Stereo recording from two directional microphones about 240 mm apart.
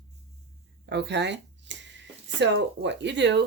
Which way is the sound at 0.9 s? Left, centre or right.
Right.